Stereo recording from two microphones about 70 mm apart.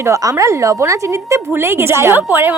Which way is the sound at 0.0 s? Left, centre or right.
Right.